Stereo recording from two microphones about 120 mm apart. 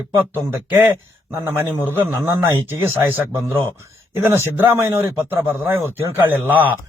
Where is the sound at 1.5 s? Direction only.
20° right (ahead or behind).